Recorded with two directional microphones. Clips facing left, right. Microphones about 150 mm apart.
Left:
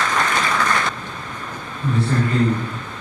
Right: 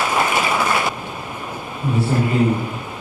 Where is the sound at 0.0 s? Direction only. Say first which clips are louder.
Right 2 dB; 10° right (ahead or behind).